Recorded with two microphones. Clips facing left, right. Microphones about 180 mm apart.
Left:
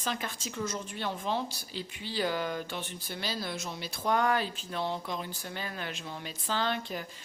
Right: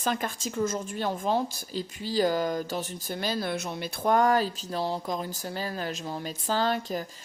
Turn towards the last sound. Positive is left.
turn(degrees=-40)  # may be behind; listen again after turning